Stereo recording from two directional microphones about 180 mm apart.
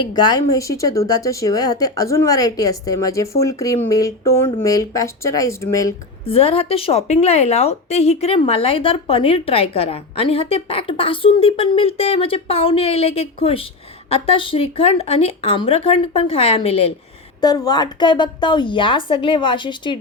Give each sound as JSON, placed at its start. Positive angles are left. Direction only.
{"t": 0.0, "sound": "speech", "side_deg": 25}
{"t": 6.2, "sound": "a woman's voice", "side_deg": 35}
{"t": 17.4, "sound": "speech", "side_deg": 20}